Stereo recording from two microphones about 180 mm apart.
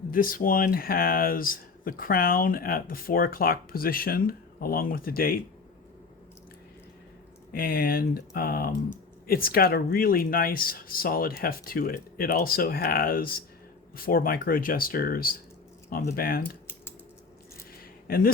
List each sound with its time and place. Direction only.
0.1 s speech: 50° left (ahead or behind)
7.5 s speech: 55° left (ahead or behind)